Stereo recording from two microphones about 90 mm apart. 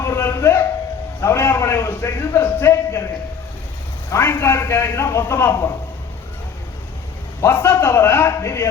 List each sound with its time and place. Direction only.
0.0 s a sound: 30° left (ahead or behind)
4.1 s a man's voice: 25° left (ahead or behind)
7.4 s a man's voice: 25° left (ahead or behind)